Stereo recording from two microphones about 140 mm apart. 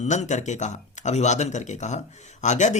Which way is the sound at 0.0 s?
55° left (ahead or behind).